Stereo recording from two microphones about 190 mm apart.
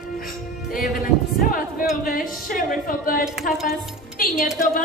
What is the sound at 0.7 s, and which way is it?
A woman's voice, 50° left (ahead or behind).